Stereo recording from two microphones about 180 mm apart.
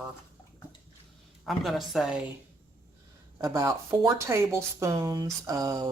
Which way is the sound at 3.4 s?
20° right (ahead or behind).